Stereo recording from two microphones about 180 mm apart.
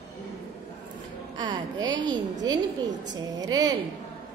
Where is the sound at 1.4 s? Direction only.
25° right (ahead or behind).